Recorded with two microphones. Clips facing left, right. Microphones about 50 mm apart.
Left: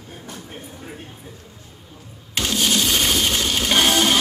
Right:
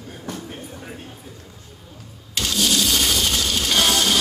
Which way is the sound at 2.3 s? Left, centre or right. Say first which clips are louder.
Left 1 dB; left.